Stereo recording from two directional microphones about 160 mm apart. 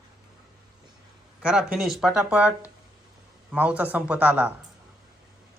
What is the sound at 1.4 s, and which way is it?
Speech, 5° right (ahead or behind).